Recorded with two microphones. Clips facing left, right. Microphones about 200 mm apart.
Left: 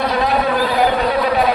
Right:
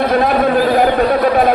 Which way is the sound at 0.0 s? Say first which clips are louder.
Right 4 dB; 50° right (ahead or behind).